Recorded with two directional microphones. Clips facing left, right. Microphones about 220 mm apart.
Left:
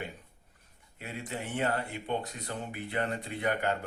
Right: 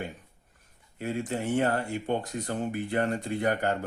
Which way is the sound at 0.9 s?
45° right (ahead or behind).